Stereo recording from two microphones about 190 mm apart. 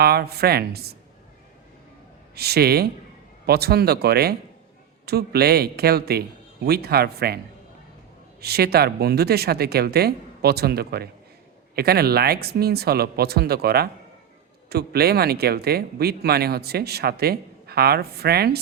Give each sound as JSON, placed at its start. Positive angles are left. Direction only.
{"t": 0.0, "sound": "speech", "side_deg": -55}
{"t": 2.3, "sound": "speech", "side_deg": -55}
{"t": 8.4, "sound": "speech", "side_deg": -55}